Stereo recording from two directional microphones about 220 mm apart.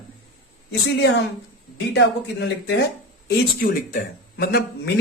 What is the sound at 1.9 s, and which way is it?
Speech, 50° left (ahead or behind).